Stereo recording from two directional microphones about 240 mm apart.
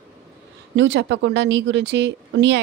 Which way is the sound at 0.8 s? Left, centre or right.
Right.